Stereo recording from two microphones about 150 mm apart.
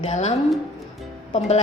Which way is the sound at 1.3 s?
45° left (ahead or behind).